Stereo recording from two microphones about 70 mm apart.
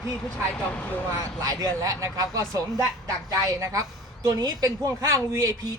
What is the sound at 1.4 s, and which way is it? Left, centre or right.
A man's voice, right.